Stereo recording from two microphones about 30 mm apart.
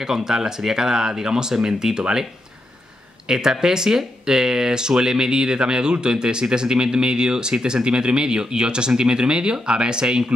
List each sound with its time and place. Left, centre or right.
0.0 s speech: centre
3.3 s speech: right